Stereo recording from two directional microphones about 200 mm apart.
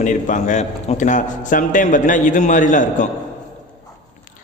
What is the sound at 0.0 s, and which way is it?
A man's voice, 40° left (ahead or behind).